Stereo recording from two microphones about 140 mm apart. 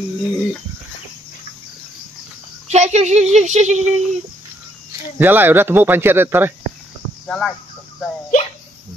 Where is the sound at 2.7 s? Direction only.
55° right (ahead or behind).